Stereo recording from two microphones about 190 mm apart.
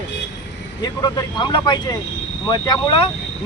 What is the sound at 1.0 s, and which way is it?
Speech, 20° left (ahead or behind).